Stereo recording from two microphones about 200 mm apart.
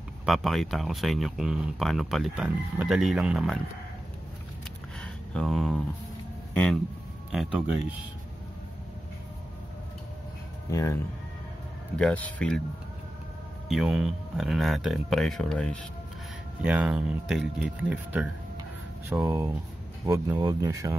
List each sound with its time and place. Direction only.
0.2 s speech: centre (ahead or behind)
5.0 s a sound: 5° left (ahead or behind)
6.5 s speech: 5° left (ahead or behind)
10.7 s speech: 15° left (ahead or behind)
12.0 s speech: 5° left (ahead or behind)
13.7 s speech: 5° right (ahead or behind)
16.6 s speech: 5° right (ahead or behind)
18.6 s a sound: 15° right (ahead or behind)
20.1 s speech: 20° right (ahead or behind)